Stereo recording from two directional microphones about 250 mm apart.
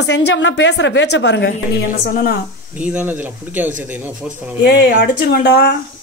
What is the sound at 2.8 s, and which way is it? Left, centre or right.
Speech, centre.